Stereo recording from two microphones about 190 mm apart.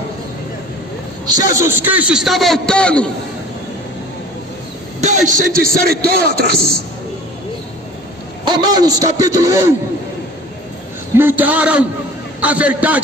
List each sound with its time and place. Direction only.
1.2 s a man's voice: 20° right (ahead or behind); by 3.1 s 5° left (ahead or behind)
5.0 s a man's voice: 40° right (ahead or behind)
8.5 s a man's voice: 20° right (ahead or behind)
11.1 s a man's voice: 10° right (ahead or behind)